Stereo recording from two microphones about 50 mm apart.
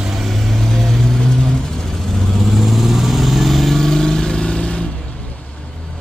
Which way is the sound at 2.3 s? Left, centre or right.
Centre.